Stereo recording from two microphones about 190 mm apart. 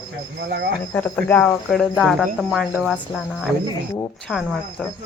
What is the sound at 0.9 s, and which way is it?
Speech, 10° left (ahead or behind).